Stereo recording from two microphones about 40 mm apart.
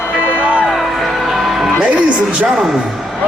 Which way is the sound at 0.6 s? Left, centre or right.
Centre.